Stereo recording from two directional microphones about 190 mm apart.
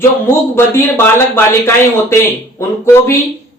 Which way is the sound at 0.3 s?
10° left (ahead or behind).